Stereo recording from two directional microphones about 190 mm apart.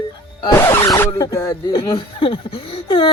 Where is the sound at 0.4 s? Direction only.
15° left (ahead or behind).